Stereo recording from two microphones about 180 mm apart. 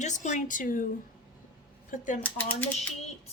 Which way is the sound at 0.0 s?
40° left (ahead or behind).